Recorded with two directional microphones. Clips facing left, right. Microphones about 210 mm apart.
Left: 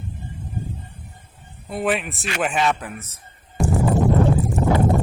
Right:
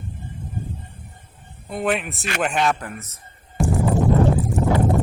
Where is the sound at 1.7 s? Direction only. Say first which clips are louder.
Even; centre (ahead or behind).